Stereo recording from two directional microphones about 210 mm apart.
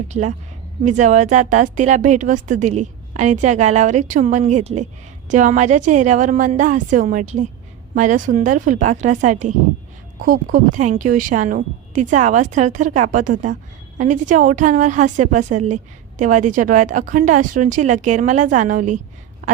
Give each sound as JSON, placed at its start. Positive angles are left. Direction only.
{"t": 0.1, "sound": "a woman's voice", "side_deg": -35}